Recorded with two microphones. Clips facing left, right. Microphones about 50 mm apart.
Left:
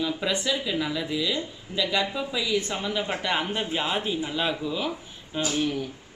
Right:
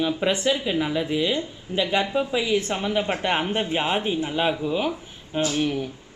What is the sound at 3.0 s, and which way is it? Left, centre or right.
Speech, centre.